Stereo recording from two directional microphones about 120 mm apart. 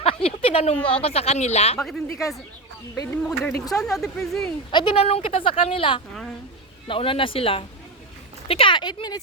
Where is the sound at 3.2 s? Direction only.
10° left (ahead or behind).